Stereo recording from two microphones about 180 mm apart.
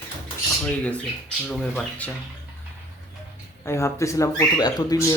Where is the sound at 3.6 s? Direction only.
15° left (ahead or behind).